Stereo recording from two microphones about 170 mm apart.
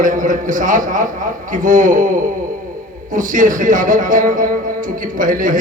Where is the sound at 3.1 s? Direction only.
50° right (ahead or behind).